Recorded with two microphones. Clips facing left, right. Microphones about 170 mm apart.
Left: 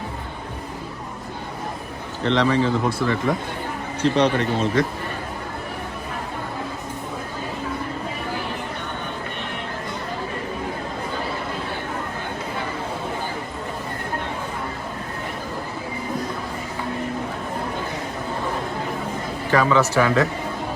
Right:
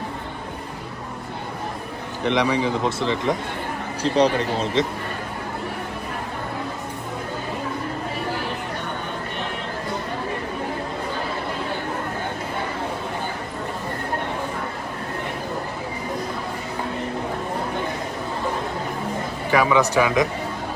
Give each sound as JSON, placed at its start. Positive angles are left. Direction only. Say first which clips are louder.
{"t": 2.2, "sound": "speech", "louder": "left 2 dB", "side_deg": -15}
{"t": 4.0, "sound": "speech", "louder": "even", "side_deg": -35}
{"t": 19.5, "sound": "speech", "louder": "even", "side_deg": -10}